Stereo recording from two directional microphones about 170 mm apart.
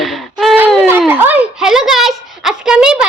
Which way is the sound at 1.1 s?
10° right (ahead or behind).